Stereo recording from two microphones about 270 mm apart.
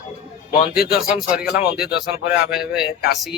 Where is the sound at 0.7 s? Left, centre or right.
Left.